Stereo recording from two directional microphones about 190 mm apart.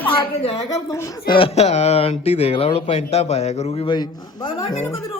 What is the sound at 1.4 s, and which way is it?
A man's voice, 35° left (ahead or behind).